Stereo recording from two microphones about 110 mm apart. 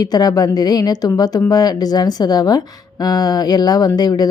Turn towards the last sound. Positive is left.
turn(degrees=40)  # may be behind; listen again after turning